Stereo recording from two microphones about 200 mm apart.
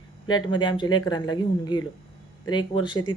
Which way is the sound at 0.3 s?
20° left (ahead or behind).